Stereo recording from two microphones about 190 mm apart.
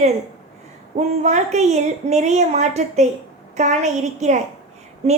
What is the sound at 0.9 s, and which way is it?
Speech, 35° right (ahead or behind).